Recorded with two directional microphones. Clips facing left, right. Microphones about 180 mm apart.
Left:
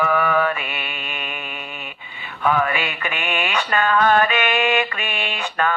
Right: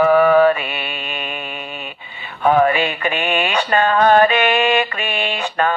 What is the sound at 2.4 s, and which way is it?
Mantra, 35° right (ahead or behind).